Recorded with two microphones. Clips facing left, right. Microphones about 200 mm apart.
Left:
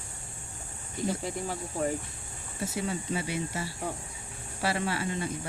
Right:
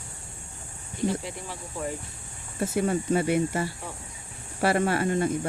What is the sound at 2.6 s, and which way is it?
Speech, 55° right (ahead or behind).